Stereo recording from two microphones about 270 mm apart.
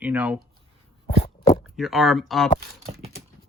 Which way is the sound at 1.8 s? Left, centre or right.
Centre.